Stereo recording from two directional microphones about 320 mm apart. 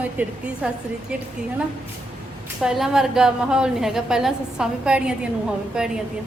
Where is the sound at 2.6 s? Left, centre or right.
Centre.